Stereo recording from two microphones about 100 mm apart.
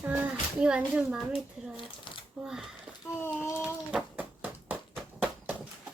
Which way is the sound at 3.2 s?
25° left (ahead or behind).